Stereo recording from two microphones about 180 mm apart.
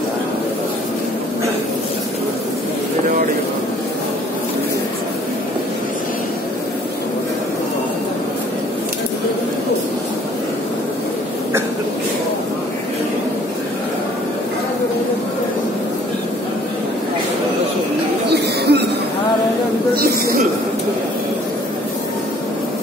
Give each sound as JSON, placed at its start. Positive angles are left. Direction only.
{"t": 18.3, "sound": "chatter", "side_deg": -65}